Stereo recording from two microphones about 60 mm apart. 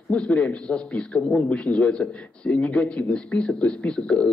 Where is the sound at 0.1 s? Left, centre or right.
Centre.